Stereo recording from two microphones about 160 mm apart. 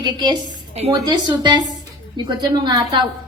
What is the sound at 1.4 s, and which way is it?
A woman's voice, 25° right (ahead or behind).